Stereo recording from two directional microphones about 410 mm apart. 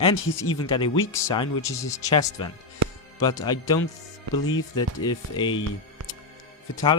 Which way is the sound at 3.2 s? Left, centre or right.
Centre.